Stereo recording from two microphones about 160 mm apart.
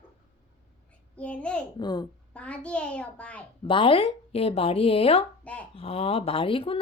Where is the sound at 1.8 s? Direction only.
25° left (ahead or behind).